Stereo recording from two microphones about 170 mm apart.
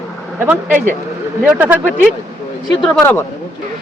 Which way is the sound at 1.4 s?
10° right (ahead or behind).